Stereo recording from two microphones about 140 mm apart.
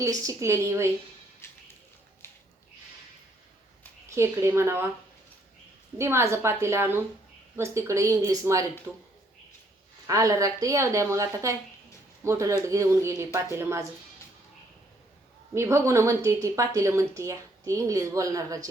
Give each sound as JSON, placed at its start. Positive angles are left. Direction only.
{"t": 0.0, "sound": "a woman's voice", "side_deg": -25}
{"t": 1.4, "sound": "music", "side_deg": 15}
{"t": 4.1, "sound": "a woman's voice", "side_deg": -20}
{"t": 6.0, "sound": "a woman's voice", "side_deg": -20}
{"t": 10.1, "sound": "a woman's voice", "side_deg": -25}
{"t": 15.5, "sound": "a woman's voice", "side_deg": -20}